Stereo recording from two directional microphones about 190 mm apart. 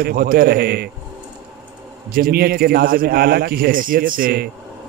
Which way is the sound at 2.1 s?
50° right (ahead or behind).